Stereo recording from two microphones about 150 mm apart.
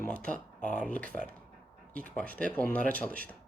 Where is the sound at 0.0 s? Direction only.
5° left (ahead or behind).